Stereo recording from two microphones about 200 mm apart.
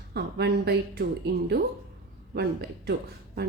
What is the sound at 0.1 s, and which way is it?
A woman's voice, 55° right (ahead or behind).